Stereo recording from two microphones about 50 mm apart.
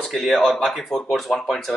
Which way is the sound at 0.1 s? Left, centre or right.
Centre.